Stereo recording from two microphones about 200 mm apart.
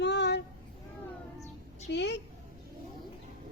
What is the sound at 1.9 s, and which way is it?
Speech, 60° left (ahead or behind).